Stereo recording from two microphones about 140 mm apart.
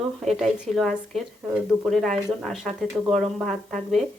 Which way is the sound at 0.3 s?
Centre (ahead or behind).